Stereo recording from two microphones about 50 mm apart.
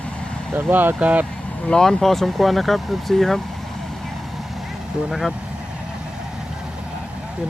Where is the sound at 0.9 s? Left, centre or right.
Right.